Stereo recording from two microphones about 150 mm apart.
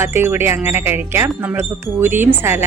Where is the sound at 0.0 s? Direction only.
15° right (ahead or behind).